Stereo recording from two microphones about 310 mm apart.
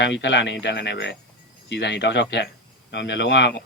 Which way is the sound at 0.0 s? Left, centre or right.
Left.